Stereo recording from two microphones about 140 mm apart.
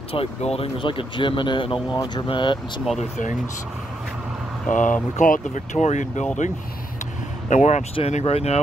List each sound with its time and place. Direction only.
0.1 s speech: 45° left (ahead or behind)
3.0 s speech: 65° left (ahead or behind)
4.6 s speech: 65° left (ahead or behind)
7.4 s speech: 60° left (ahead or behind)
7.9 s speech: 45° left (ahead or behind)